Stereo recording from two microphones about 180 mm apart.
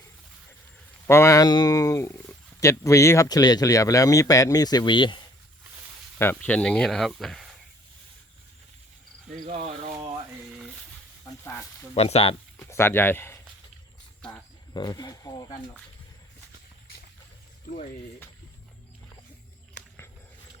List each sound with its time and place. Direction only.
1.0 s speech: 15° left (ahead or behind)
6.1 s speech: 10° left (ahead or behind)
11.9 s speech: 35° left (ahead or behind)
12.5 s speech: 15° left (ahead or behind)
14.2 s wild animals: 5° left (ahead or behind)
14.7 s speech: 25° left (ahead or behind)